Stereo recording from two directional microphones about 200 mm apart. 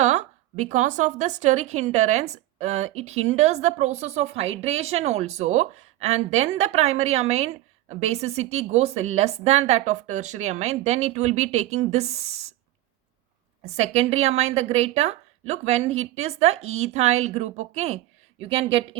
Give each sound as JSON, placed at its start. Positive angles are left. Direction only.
{"t": 0.0, "sound": "a sound", "side_deg": -35}
{"t": 0.6, "sound": "a woman's voice", "side_deg": -40}
{"t": 13.6, "sound": "a woman's voice", "side_deg": -35}